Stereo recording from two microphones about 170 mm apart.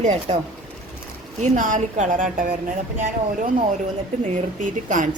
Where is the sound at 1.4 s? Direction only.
50° right (ahead or behind).